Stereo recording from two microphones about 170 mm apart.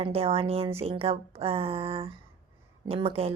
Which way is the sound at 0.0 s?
35° right (ahead or behind).